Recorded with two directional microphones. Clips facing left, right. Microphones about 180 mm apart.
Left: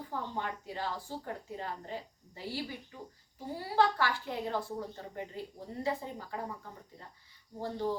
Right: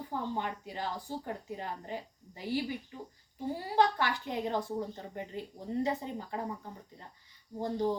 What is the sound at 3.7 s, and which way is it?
A woman's voice, 20° right (ahead or behind).